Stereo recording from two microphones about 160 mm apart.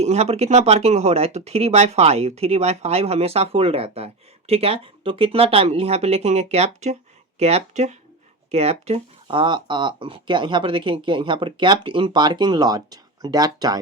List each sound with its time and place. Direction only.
0.0 s speech: 45° right (ahead or behind); by 13.7 s 25° right (ahead or behind)